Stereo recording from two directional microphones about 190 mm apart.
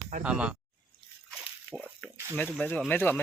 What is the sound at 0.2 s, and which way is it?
Speech, 5° right (ahead or behind).